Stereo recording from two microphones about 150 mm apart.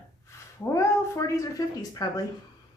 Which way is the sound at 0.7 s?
20° left (ahead or behind).